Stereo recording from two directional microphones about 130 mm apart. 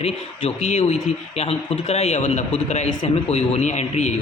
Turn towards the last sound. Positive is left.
turn(degrees=65)  # may be behind; listen again after turning